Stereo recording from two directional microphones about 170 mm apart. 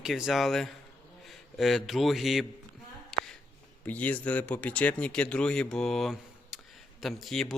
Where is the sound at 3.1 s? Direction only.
5° left (ahead or behind).